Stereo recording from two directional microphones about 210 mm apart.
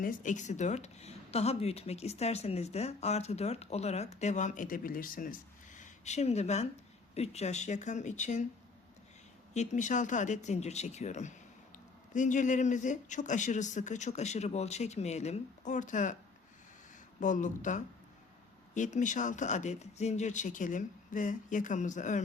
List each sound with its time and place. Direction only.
0.0 s speech: 40° left (ahead or behind)
9.6 s speech: 35° left (ahead or behind)
17.2 s speech: 35° left (ahead or behind)